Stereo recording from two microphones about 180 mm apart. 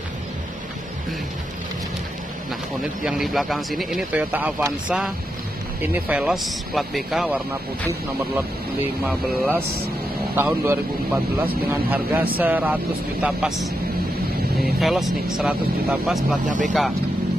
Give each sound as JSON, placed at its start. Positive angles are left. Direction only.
{"t": 2.8, "sound": "speech", "side_deg": 0}
{"t": 9.0, "sound": "speech", "side_deg": -10}
{"t": 16.4, "sound": "speech", "side_deg": -45}